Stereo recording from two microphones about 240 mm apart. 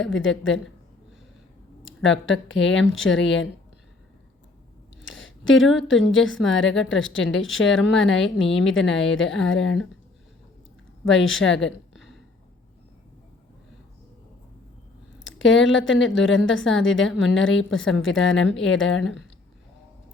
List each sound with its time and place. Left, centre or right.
0.0 s a woman's voice: left
1.8 s a woman's voice: left
5.0 s a sound: left
5.7 s a woman's voice: left
11.0 s a woman's voice: left
15.2 s a woman's voice: left